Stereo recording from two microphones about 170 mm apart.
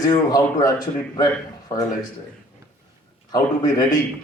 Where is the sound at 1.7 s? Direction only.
20° left (ahead or behind).